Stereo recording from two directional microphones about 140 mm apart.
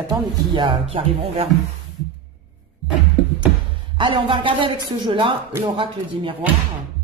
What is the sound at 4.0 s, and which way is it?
A woman's voice, 35° right (ahead or behind).